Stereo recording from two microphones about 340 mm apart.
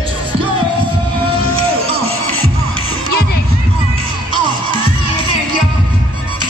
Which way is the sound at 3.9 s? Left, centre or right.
Centre.